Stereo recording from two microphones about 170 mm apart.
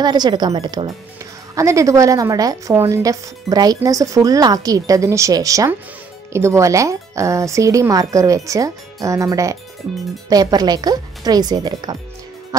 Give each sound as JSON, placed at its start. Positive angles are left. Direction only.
{"t": 0.0, "sound": "a woman's voice", "side_deg": -25}